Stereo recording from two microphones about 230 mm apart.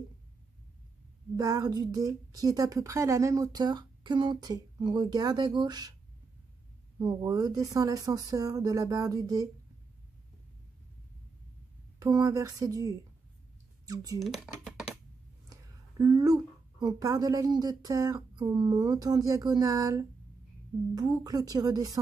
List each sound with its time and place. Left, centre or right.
1.3 s a woman's voice: centre
7.0 s a woman's voice: centre
12.0 s a woman's voice: centre
14.2 s speech: centre
15.5 s a woman's voice: centre